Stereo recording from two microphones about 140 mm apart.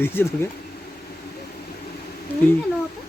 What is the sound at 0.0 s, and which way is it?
Speech, 15° left (ahead or behind).